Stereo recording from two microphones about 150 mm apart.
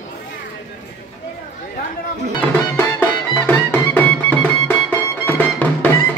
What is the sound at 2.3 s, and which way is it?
Music, 15° left (ahead or behind).